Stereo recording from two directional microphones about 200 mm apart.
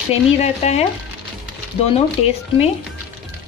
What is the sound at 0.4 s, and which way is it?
Speech, 35° left (ahead or behind).